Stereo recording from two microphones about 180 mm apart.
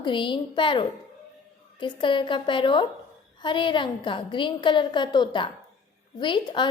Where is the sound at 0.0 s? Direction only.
25° left (ahead or behind).